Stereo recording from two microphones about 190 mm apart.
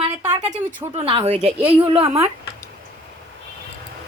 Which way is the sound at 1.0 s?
30° right (ahead or behind).